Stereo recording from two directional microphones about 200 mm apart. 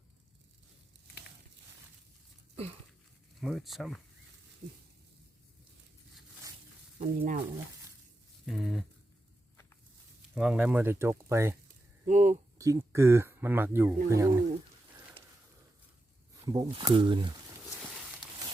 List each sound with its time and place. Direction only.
3.4 s speech: centre (ahead or behind)
7.0 s speech: 40° right (ahead or behind)
8.4 s speech: centre (ahead or behind)
10.3 s speech: 5° right (ahead or behind)
12.0 s speech: 35° right (ahead or behind)
12.5 s speech: 15° right (ahead or behind)
16.5 s speech: 20° right (ahead or behind)